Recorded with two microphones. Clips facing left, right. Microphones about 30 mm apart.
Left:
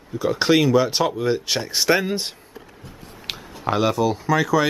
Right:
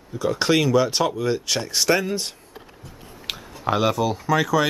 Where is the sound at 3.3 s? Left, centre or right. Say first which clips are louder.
Even; centre.